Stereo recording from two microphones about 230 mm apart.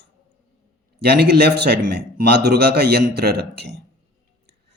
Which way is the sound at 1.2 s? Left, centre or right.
Right.